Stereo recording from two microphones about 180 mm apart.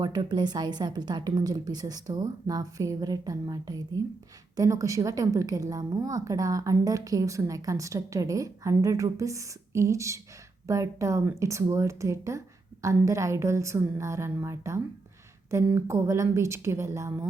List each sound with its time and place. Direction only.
0.0 s a woman's voice: 25° right (ahead or behind)